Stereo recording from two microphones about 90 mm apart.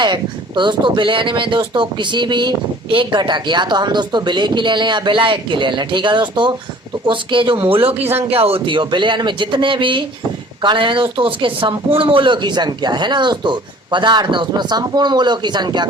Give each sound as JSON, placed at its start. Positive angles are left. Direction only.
{"t": 0.0, "sound": "speech", "side_deg": -60}